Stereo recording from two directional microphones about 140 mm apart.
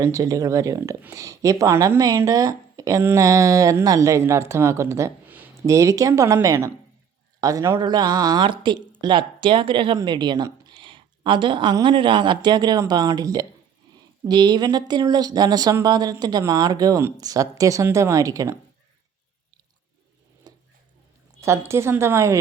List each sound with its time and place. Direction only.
0.0 s speech: 25° right (ahead or behind)
20.5 s a sound: 25° right (ahead or behind)
21.4 s speech: 20° right (ahead or behind)